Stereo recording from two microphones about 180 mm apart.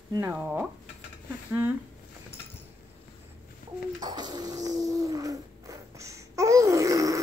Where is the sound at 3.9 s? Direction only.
25° right (ahead or behind).